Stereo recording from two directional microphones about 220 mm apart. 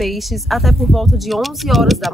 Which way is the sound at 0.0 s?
Centre (ahead or behind).